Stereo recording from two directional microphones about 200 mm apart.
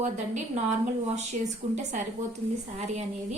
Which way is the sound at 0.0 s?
35° right (ahead or behind).